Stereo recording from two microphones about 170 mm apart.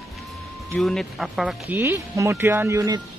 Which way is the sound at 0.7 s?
Centre (ahead or behind).